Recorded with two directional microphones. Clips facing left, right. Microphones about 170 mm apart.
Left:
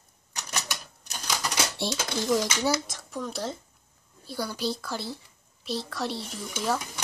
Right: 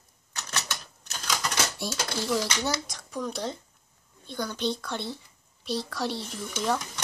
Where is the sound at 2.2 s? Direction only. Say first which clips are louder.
Left 3 dB; 15° left (ahead or behind).